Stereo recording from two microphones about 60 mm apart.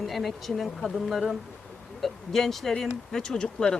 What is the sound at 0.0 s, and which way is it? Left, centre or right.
Speech, centre.